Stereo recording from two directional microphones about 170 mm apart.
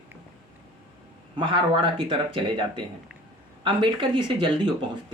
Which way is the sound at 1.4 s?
30° right (ahead or behind).